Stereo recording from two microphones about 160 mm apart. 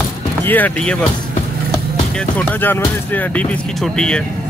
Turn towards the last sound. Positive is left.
turn(degrees=5)  # may be behind; listen again after turning